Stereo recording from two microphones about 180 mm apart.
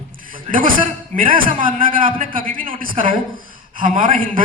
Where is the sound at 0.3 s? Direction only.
50° right (ahead or behind).